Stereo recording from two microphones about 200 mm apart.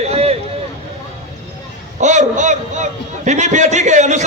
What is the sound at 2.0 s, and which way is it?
A man's voice, 35° right (ahead or behind).